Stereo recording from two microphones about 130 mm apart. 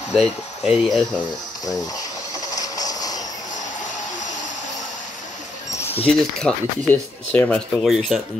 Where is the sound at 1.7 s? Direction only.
25° left (ahead or behind).